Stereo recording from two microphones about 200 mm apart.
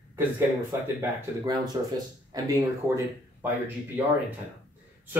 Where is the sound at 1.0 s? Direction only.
15° right (ahead or behind).